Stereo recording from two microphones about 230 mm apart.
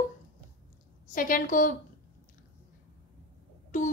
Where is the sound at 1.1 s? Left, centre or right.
Left.